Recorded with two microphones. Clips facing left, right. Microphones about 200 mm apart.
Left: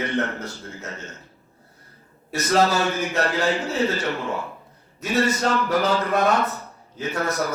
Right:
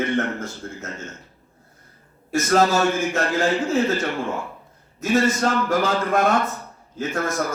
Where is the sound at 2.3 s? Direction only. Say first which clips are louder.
Right 2 dB; 50° right (ahead or behind).